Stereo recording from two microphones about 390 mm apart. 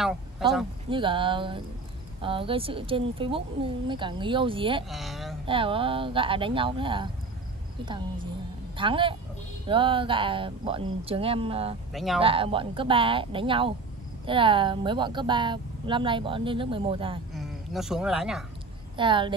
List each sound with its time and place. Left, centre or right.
0.8 s speech: centre
4.8 s speech: centre
5.5 s speech: centre
11.9 s speech: centre
12.2 s speech: centre
17.3 s speech: centre
18.9 s speech: centre